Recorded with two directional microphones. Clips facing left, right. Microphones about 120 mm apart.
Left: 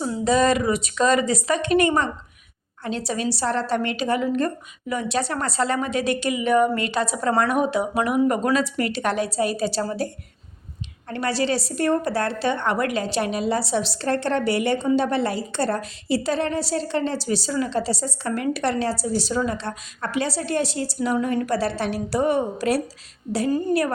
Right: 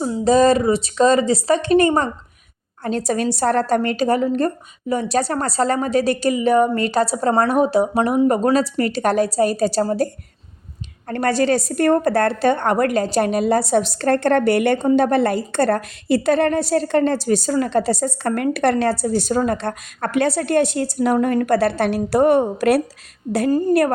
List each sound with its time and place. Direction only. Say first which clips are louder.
0.0 s a woman's voice: right 5 dB; 30° right (ahead or behind)
2.8 s a woman's voice: right 5 dB; 45° right (ahead or behind)
11.1 s a woman's voice: right 6 dB; 50° right (ahead or behind)
23.3 s a woman's voice: right 5 dB; 35° right (ahead or behind)